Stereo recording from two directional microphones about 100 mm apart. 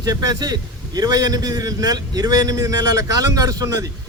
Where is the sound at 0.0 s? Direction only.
40° right (ahead or behind).